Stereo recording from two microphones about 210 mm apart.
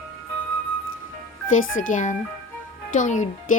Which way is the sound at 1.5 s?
40° left (ahead or behind).